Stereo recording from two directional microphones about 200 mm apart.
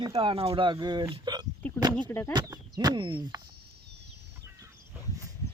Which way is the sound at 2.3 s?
20° right (ahead or behind).